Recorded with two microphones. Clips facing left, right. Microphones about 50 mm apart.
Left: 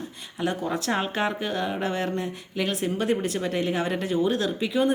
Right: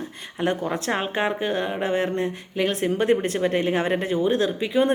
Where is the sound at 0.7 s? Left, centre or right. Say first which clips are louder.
Right 1 dB; right.